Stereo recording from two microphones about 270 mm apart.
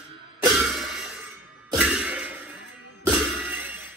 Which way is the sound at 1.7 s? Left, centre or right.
Centre.